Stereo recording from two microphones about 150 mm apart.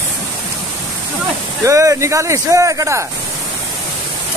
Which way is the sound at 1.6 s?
20° right (ahead or behind).